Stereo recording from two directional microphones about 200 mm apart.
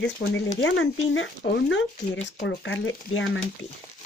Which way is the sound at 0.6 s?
65° left (ahead or behind).